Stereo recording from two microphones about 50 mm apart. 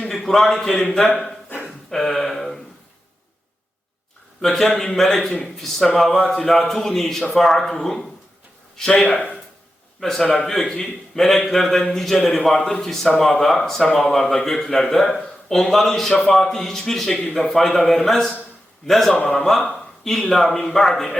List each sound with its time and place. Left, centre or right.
0.1 s a sound: centre
0.5 s a man's voice: centre
4.4 s a man's voice: centre